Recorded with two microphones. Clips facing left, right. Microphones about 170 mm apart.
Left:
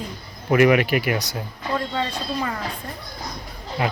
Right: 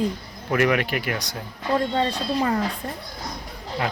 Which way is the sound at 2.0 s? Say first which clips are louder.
Right 3 dB; 35° right (ahead or behind).